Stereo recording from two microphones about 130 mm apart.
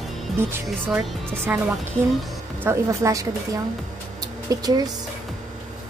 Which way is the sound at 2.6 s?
20° right (ahead or behind).